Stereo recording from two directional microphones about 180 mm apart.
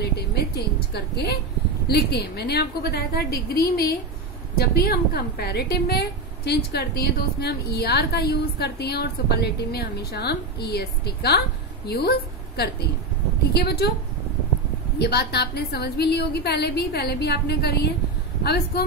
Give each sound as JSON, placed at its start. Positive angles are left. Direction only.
{"t": 0.0, "sound": "a sound", "side_deg": 65}
{"t": 1.9, "sound": "a woman's voice", "side_deg": 65}
{"t": 15.0, "sound": "a woman's voice", "side_deg": 65}